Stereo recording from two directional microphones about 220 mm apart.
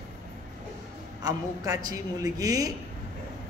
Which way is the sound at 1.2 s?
15° right (ahead or behind).